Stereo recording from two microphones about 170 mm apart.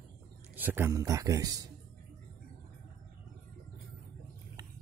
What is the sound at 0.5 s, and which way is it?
Speech, 10° right (ahead or behind).